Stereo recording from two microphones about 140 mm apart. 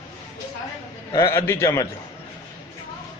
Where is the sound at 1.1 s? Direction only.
20° left (ahead or behind).